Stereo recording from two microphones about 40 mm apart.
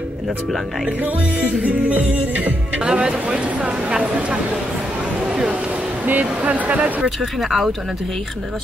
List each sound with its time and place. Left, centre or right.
1.6 s music: right
2.8 s speech: right
6.0 s speech: right
7.2 s speech: centre